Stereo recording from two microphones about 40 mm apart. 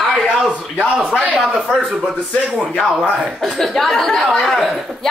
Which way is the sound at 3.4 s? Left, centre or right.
Centre.